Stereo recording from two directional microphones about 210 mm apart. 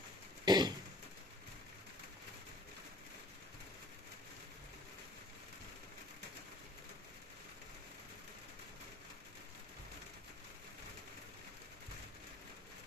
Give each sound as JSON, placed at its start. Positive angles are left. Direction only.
{"t": 0.5, "sound": "throat clearing", "side_deg": -20}